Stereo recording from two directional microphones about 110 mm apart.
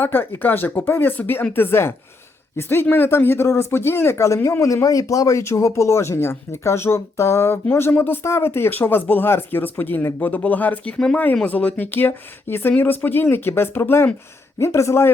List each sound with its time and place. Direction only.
0.0 s speech: 20° left (ahead or behind)